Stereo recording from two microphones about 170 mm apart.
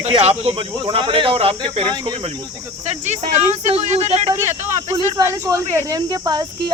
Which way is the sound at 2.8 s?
40° right (ahead or behind).